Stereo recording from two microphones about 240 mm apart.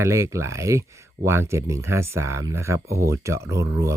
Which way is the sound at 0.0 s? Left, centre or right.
Centre.